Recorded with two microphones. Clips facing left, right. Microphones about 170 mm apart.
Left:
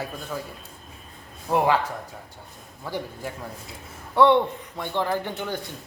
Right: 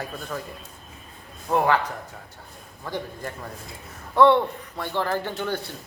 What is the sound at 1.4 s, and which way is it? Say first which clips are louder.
Speech: even; 15° left (ahead or behind).